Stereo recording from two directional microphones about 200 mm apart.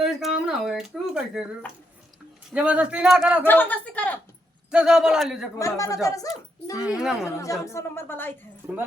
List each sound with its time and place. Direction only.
0.0 s a sound: centre (ahead or behind)
0.4 s speech: centre (ahead or behind)
2.5 s speech: 5° right (ahead or behind)
3.4 s speech: 10° left (ahead or behind)
4.7 s speech: 5° right (ahead or behind)
5.5 s speech: 15° left (ahead or behind)
6.7 s speech: 5° right (ahead or behind)
7.3 s speech: 15° left (ahead or behind)